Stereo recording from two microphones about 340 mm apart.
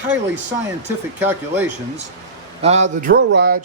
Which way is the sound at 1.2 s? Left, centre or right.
Centre.